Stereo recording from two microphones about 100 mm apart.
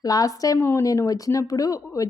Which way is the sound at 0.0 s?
40° left (ahead or behind).